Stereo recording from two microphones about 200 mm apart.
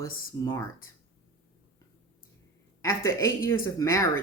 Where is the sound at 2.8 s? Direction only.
15° left (ahead or behind).